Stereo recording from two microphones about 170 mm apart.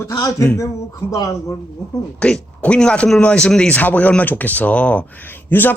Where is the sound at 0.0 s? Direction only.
20° left (ahead or behind).